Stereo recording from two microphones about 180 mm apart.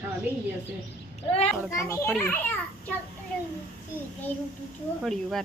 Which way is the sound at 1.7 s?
15° left (ahead or behind).